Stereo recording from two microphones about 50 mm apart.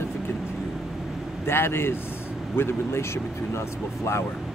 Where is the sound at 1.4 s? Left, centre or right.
Left.